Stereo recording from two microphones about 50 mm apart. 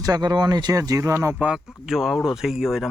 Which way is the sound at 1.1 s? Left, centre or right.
Right.